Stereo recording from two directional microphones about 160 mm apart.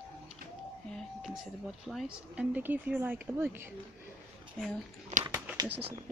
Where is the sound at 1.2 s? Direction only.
Centre (ahead or behind).